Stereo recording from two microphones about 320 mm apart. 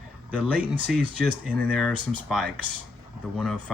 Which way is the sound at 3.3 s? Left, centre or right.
Centre.